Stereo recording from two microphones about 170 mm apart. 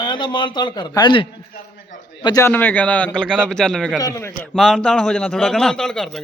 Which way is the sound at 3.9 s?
20° left (ahead or behind).